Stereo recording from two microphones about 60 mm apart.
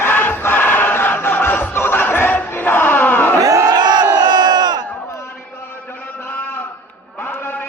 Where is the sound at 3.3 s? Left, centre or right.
Right.